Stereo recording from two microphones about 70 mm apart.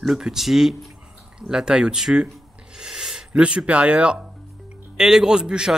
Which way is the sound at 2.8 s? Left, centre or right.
Centre.